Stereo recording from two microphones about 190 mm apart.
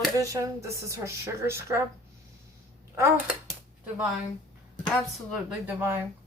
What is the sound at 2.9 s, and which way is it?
Speech, 15° right (ahead or behind).